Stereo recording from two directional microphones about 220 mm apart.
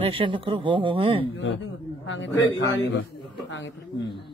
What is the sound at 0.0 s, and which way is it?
Speech, 25° right (ahead or behind).